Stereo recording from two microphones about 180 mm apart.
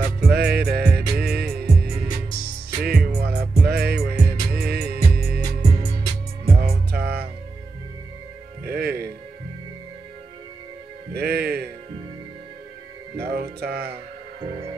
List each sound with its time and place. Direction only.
0.2 s music: 60° right (ahead or behind)
8.6 s music: 60° right (ahead or behind)
11.1 s music: 60° right (ahead or behind)
13.1 s music: 60° right (ahead or behind)